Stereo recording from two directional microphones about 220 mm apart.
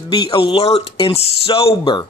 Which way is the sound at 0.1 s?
25° left (ahead or behind).